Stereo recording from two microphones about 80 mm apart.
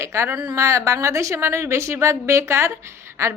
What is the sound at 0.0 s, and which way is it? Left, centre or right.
A woman's voice, right.